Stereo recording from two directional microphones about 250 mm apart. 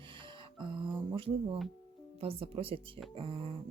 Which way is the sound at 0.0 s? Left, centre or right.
Centre.